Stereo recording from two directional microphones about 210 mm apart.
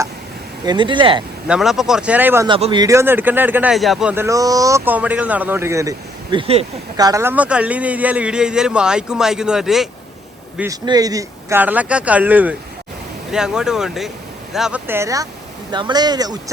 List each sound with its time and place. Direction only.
0.6 s speech: 20° right (ahead or behind)
1.5 s speech: centre (ahead or behind)
2.5 s speech: 25° right (ahead or behind)
6.3 s speech: 25° right (ahead or behind); by 9.9 s centre (ahead or behind)
10.6 s speech: 15° right (ahead or behind)